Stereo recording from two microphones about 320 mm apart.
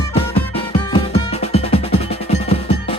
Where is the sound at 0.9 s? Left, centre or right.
Centre.